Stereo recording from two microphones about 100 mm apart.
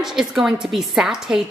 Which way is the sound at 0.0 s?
5° right (ahead or behind).